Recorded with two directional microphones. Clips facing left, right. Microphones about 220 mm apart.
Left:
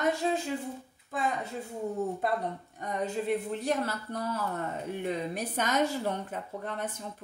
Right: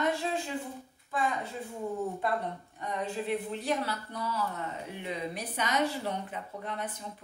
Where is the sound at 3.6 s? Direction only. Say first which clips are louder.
Left 2 dB; 45° left (ahead or behind).